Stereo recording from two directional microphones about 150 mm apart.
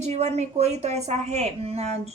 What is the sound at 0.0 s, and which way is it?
A woman's voice, 45° right (ahead or behind).